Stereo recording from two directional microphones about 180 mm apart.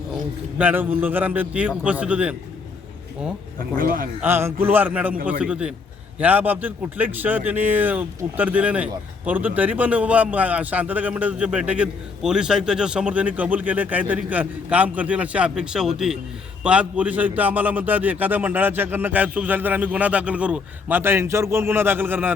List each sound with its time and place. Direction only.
0.6 s a man's voice: 10° right (ahead or behind)
3.8 s a man's voice: 50° right (ahead or behind)
4.2 s a man's voice: 10° right (ahead or behind)